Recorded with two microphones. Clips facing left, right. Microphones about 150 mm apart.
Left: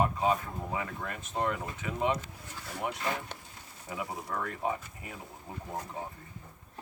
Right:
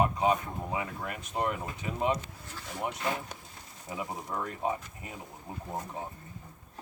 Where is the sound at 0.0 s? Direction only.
15° right (ahead or behind).